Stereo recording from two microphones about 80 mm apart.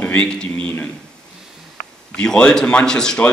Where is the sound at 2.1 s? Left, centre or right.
Centre.